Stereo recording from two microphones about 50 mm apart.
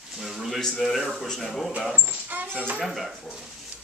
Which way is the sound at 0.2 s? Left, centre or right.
Centre.